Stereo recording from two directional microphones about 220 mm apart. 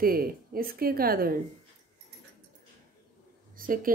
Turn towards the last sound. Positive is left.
turn(degrees=-40)  # may be behind; listen again after turning